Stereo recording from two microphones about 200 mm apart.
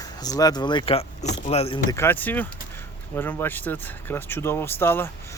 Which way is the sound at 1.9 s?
10° left (ahead or behind).